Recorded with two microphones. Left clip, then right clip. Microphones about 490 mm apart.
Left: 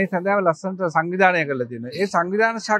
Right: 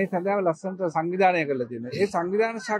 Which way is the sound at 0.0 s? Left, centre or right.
Left.